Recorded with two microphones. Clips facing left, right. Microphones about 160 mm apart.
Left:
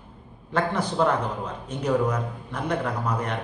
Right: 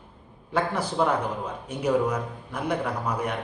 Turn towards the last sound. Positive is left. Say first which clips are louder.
# left 1 dB
turn(degrees=-10)  # may be behind; listen again after turning